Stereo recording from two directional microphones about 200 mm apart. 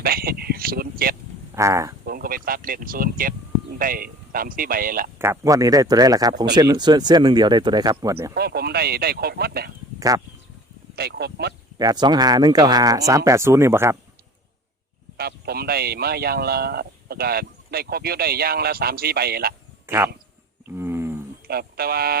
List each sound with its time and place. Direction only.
0.0 s a sound: 50° right (ahead or behind)
1.5 s speech: 15° right (ahead or behind)
2.0 s speech: 45° right (ahead or behind)
5.2 s speech: 15° right (ahead or behind)
8.4 s speech: 50° right (ahead or behind)
10.1 s speech: 20° right (ahead or behind)
10.9 s speech: 55° right (ahead or behind)
11.8 s speech: 20° right (ahead or behind)
15.2 s speech: 50° right (ahead or behind)
19.9 s speech: 10° right (ahead or behind)
20.7 s wild animals: 10° right (ahead or behind)
21.4 s speech: 50° right (ahead or behind)